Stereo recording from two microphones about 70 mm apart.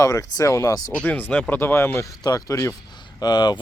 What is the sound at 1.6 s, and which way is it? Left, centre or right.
Speech, left.